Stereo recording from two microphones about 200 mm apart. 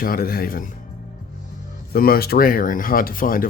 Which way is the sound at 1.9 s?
50° left (ahead or behind).